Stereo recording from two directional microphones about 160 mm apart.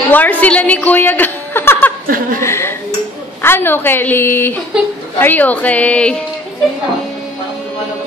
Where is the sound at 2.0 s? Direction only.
60° right (ahead or behind).